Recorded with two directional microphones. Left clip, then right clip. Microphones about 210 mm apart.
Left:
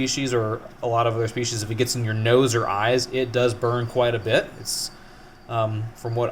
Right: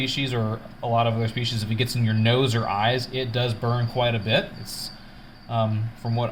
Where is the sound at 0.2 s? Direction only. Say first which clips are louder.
Left 4 dB; 40° left (ahead or behind).